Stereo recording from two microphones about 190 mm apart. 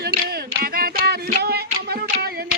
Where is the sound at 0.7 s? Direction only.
50° right (ahead or behind).